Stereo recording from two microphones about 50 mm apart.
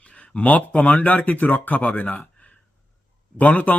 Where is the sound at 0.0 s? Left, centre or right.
Left.